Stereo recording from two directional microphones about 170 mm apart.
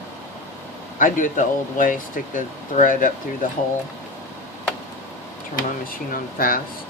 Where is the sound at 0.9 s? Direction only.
50° left (ahead or behind).